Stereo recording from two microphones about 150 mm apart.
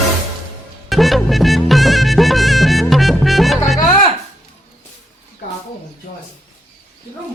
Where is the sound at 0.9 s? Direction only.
Centre (ahead or behind).